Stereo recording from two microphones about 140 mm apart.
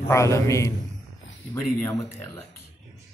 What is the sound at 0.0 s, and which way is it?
Speech, 20° left (ahead or behind).